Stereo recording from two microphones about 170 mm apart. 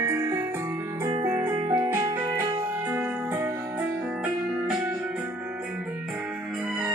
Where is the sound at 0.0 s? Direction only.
15° right (ahead or behind).